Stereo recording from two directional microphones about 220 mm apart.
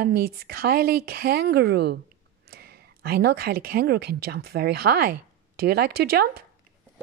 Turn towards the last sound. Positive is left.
turn(degrees=-45)  # may be behind; listen again after turning